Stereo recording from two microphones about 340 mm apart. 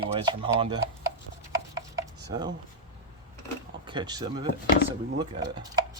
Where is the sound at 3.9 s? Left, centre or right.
Centre.